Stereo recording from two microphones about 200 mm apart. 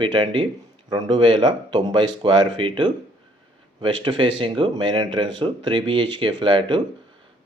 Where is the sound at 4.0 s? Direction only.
25° right (ahead or behind).